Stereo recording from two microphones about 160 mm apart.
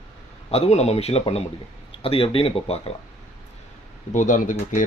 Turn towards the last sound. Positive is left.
turn(degrees=55)  # may be behind; listen again after turning